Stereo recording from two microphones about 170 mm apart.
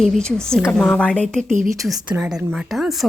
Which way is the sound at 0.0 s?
Centre (ahead or behind).